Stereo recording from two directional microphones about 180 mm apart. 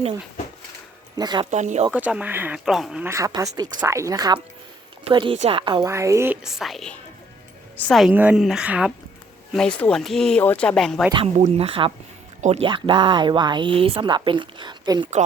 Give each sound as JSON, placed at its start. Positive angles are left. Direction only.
{"t": 1.1, "sound": "speech", "side_deg": -20}
{"t": 1.5, "sound": "speech", "side_deg": -40}
{"t": 1.9, "sound": "speech", "side_deg": -5}
{"t": 3.1, "sound": "speech", "side_deg": -20}
{"t": 5.9, "sound": "speech", "side_deg": -15}
{"t": 11.3, "sound": "speech", "side_deg": -40}